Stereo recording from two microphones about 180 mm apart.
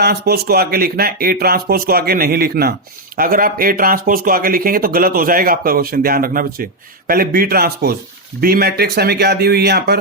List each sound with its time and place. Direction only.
0.0 s speech: 60° right (ahead or behind)